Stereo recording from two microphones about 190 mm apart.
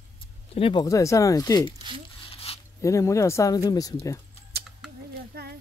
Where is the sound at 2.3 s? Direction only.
30° left (ahead or behind).